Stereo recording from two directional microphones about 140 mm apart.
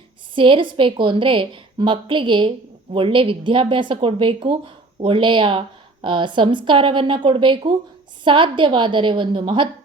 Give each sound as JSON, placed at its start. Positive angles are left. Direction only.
{"t": 0.3, "sound": "a woman's voice", "side_deg": -35}